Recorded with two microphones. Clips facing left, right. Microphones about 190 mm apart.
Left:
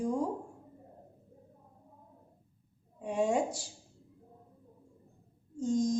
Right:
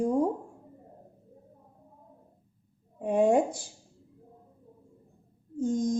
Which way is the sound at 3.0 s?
55° right (ahead or behind).